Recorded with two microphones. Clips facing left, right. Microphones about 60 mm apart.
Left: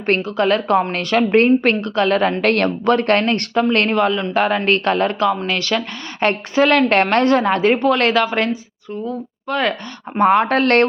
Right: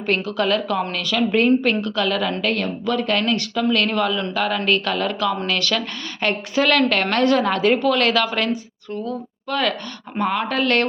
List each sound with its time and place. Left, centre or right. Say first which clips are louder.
0.2 s speech: left 3 dB; left
2.4 s a woman's voice: left 6 dB; left
6.8 s a woman's voice: left 4 dB; left
9.5 s a woman's voice: left 2 dB; left
10.2 s speech: left 7 dB; left